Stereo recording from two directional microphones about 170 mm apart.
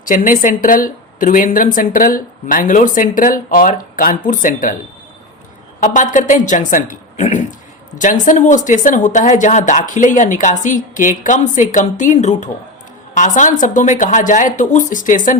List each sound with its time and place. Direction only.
0.0 s speech: 50° left (ahead or behind)
5.8 s speech: 50° left (ahead or behind)